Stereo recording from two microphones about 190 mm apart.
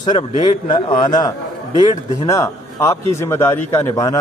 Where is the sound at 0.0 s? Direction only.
25° left (ahead or behind).